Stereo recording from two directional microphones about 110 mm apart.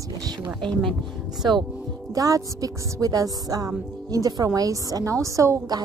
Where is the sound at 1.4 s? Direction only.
40° right (ahead or behind).